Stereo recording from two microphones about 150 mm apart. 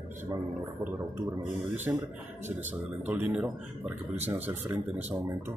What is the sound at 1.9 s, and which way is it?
Speech, 15° right (ahead or behind).